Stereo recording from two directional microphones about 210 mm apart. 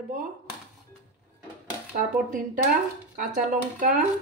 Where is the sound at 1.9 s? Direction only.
40° right (ahead or behind).